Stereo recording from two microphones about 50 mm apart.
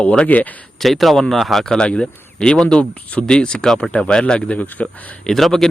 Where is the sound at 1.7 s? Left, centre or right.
Centre.